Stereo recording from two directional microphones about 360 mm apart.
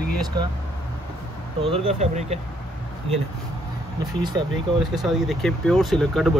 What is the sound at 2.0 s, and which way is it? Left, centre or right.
Speech, centre.